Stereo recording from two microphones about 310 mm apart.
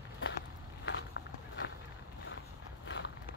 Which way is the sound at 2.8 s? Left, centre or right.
Left.